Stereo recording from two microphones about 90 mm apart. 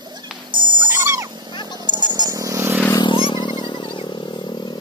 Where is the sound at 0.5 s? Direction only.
60° right (ahead or behind).